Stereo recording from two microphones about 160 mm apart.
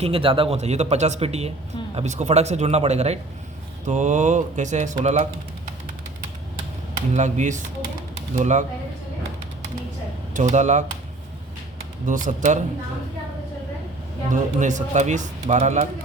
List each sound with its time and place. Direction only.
0.0 s speech: 35° right (ahead or behind)
7.1 s speech: 45° right (ahead or behind)
8.1 s pigeon: 50° right (ahead or behind)
10.3 s speech: 45° right (ahead or behind)
12.0 s speech: 55° right (ahead or behind)
14.3 s speech: 50° right (ahead or behind)